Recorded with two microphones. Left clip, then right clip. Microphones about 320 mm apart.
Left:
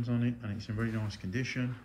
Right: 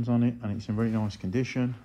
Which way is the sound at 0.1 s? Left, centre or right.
Centre.